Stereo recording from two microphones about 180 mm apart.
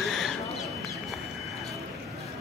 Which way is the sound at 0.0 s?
Centre (ahead or behind).